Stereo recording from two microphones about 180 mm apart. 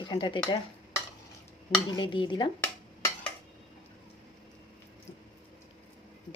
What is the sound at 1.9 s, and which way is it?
Dishes, 25° left (ahead or behind).